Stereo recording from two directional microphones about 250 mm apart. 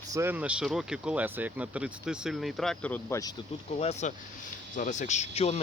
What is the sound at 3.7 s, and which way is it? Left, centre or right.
Speech, left.